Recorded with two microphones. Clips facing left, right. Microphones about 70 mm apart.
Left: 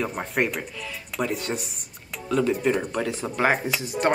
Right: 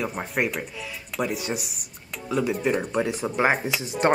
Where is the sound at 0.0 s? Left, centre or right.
Centre.